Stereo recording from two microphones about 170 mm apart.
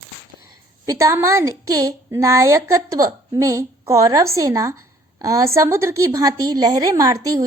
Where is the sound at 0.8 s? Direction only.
15° right (ahead or behind).